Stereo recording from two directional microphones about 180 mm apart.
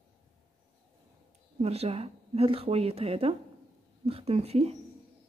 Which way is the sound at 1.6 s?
35° right (ahead or behind).